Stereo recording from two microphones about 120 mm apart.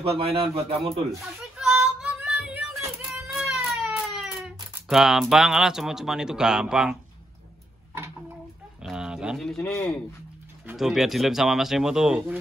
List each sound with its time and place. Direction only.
0.2 s a man's voice: 50° right (ahead or behind)
1.2 s child singing: 5° right (ahead or behind)
3.1 s baby cry: centre (ahead or behind)
4.8 s speech: 5° right (ahead or behind)
8.8 s a sound: 5° right (ahead or behind)
10.8 s speech: centre (ahead or behind)